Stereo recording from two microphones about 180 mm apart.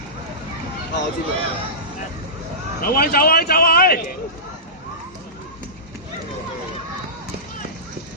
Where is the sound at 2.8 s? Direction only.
55° left (ahead or behind).